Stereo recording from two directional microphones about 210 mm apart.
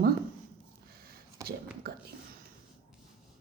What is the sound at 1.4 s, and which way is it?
Speech, 15° right (ahead or behind).